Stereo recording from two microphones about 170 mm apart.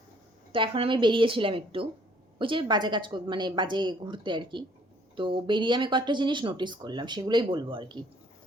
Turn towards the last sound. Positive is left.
turn(degrees=-25)  # may be behind; listen again after turning